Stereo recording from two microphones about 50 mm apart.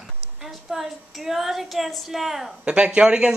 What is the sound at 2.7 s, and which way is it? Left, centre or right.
Speech, right.